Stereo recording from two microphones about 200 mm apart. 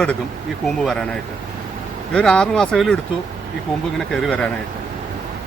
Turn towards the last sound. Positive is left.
turn(degrees=5)  # may be behind; listen again after turning